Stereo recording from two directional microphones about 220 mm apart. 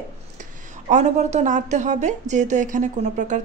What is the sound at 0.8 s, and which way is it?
A woman's voice, 30° right (ahead or behind).